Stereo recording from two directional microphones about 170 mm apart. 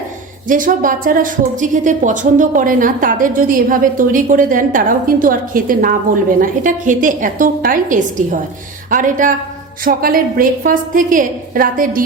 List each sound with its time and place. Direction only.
0.4 s a woman's voice: 50° right (ahead or behind)